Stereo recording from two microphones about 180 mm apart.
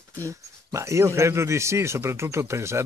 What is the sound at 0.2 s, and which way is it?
Speech, 15° right (ahead or behind).